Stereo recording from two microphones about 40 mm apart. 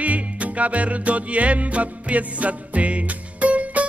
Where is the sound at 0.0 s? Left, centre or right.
Right.